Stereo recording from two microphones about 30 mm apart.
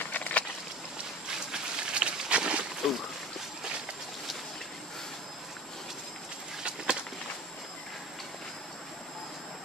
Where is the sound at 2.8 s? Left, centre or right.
Centre.